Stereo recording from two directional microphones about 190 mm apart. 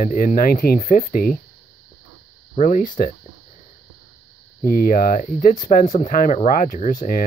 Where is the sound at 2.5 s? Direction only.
40° left (ahead or behind).